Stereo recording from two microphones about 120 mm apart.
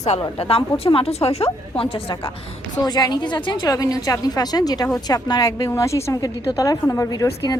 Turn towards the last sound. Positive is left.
turn(degrees=30)  # may be behind; listen again after turning